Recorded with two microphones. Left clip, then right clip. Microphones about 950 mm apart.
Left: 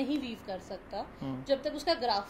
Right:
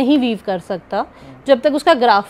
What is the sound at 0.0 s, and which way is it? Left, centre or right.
A woman's voice, right.